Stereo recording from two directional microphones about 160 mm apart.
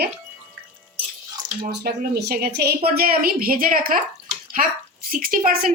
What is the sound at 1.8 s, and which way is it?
A woman's voice, 80° right.